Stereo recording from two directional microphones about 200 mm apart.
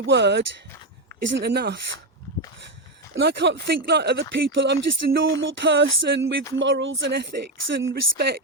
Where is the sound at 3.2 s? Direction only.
60° right (ahead or behind).